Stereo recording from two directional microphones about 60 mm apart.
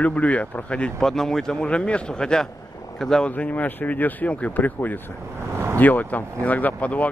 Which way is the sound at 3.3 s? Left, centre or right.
Left.